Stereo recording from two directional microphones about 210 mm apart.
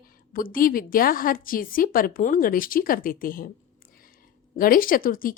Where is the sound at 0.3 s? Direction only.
45° left (ahead or behind).